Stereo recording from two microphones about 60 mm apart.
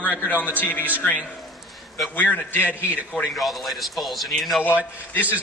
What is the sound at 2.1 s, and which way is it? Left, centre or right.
Speech, left.